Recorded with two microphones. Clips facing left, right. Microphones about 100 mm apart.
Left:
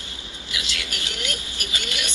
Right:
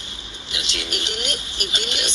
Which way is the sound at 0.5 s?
25° right (ahead or behind).